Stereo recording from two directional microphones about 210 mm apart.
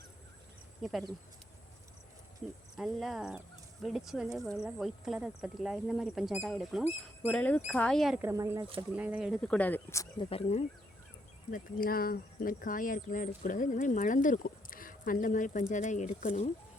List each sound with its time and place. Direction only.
0.8 s speech: centre (ahead or behind)
2.7 s speech: centre (ahead or behind); by 10.7 s 30° left (ahead or behind)
11.5 s speech: 45° left (ahead or behind)